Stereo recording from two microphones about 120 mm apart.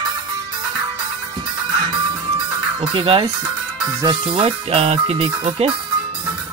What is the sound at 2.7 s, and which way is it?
Speech, 50° right (ahead or behind).